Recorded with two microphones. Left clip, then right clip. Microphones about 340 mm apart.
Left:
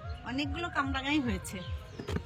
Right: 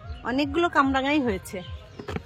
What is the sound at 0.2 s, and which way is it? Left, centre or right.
Speech, centre.